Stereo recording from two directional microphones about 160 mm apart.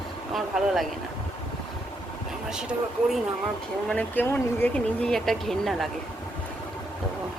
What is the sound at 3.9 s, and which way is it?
Speech, 10° left (ahead or behind).